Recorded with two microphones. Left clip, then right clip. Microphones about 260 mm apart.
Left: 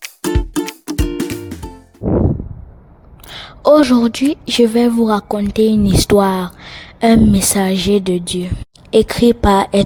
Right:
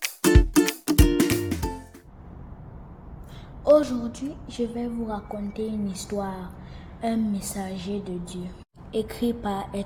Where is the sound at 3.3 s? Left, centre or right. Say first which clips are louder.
Left 8 dB; left.